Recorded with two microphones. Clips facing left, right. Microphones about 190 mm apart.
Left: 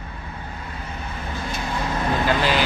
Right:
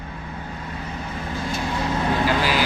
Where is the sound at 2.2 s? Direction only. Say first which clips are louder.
Left 3 dB; 5° right (ahead or behind).